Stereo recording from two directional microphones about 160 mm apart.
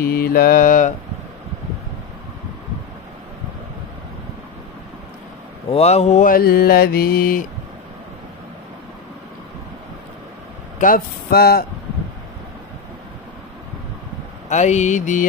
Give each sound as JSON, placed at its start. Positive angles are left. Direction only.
{"t": 0.0, "sound": "mantra", "side_deg": 70}
{"t": 5.7, "sound": "mantra", "side_deg": 40}
{"t": 10.8, "sound": "speech", "side_deg": 70}
{"t": 14.5, "sound": "mantra", "side_deg": 45}